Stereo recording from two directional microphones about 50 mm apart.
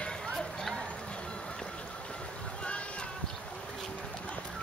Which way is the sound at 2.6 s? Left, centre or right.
Left.